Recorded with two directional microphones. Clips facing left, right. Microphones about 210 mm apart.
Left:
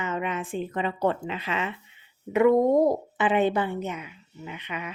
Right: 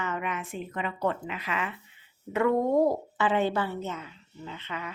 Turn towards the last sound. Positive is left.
turn(degrees=15)  # may be behind; listen again after turning